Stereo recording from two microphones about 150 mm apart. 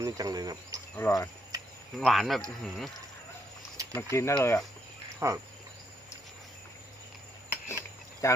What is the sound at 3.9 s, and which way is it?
Speech, 20° left (ahead or behind).